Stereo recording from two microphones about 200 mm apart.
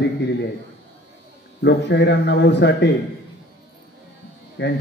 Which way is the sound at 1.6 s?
60° left (ahead or behind).